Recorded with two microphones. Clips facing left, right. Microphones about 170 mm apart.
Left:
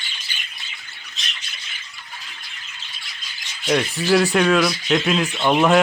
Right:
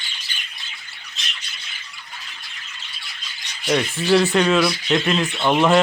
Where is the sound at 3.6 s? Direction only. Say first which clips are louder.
Even; centre (ahead or behind).